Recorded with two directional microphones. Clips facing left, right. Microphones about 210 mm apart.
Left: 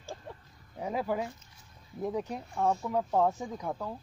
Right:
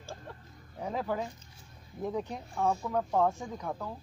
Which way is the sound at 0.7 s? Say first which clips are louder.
Left 1 dB; 10° left (ahead or behind).